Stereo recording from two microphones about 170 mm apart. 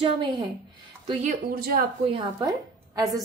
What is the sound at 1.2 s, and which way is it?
Speech, 60° right (ahead or behind).